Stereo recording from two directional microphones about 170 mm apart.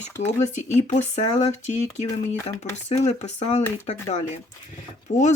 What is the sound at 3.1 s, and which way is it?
Speech, 40° left (ahead or behind).